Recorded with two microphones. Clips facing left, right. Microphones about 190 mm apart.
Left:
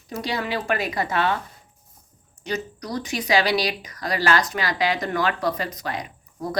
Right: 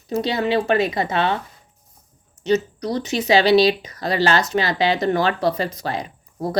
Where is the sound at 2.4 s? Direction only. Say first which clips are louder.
Right 10 dB; 25° right (ahead or behind).